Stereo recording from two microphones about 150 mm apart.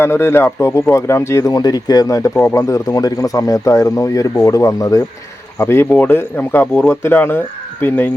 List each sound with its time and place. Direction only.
0.0 s speech: 15° left (ahead or behind)